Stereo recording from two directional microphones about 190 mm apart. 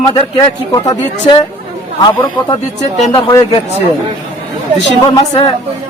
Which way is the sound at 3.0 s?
25° left (ahead or behind).